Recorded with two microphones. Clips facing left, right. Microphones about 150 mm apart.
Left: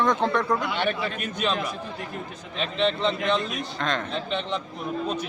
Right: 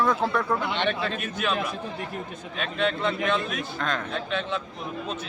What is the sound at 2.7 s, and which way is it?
Speech, 20° left (ahead or behind).